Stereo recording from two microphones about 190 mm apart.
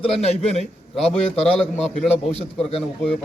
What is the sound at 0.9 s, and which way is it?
Speech, centre (ahead or behind).